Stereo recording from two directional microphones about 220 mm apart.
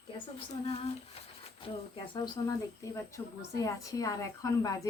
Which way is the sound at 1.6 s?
25° left (ahead or behind).